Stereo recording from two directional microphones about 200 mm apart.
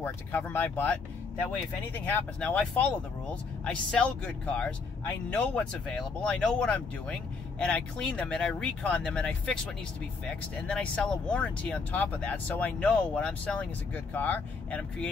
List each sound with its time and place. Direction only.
0.0 s speech: 10° left (ahead or behind)
2.0 s speech: 5° left (ahead or behind)